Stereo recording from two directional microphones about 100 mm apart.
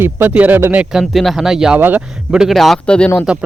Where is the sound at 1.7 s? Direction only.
15° right (ahead or behind).